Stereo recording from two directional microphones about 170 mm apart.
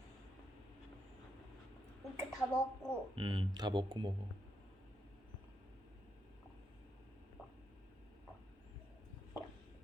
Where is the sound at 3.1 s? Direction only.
30° right (ahead or behind).